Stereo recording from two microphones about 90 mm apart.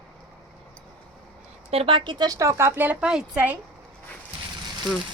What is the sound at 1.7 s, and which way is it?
Speech, 80° right.